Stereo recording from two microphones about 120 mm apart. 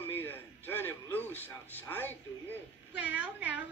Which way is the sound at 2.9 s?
10° right (ahead or behind).